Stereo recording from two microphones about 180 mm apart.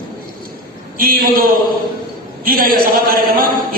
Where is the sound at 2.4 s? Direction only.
55° right (ahead or behind).